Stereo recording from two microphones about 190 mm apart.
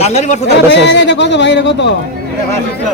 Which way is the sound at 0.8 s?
65° left (ahead or behind).